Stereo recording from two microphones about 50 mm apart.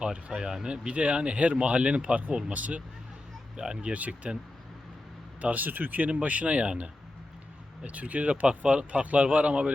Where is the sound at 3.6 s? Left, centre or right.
Centre.